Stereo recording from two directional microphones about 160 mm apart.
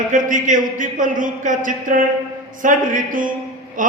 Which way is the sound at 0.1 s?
55° right (ahead or behind).